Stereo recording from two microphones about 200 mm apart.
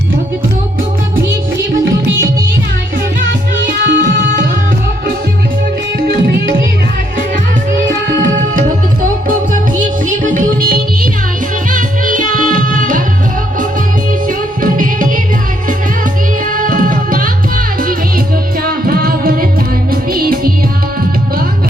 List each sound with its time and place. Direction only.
3.7 s music: 40° right (ahead or behind)
6.0 s music: 45° right (ahead or behind)
9.2 s music: 40° right (ahead or behind)
14.3 s music: 40° right (ahead or behind)
16.5 s tabla: 45° right (ahead or behind)
18.6 s music: 45° right (ahead or behind)